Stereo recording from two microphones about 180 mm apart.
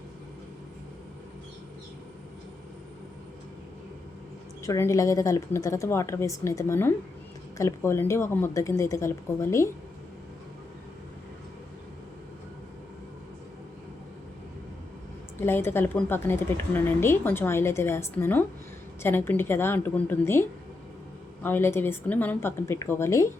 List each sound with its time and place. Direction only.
4.6 s a woman's voice: 15° left (ahead or behind)
15.4 s a woman's voice: 15° left (ahead or behind)